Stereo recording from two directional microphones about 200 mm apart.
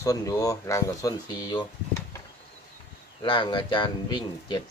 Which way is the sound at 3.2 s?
25° left (ahead or behind).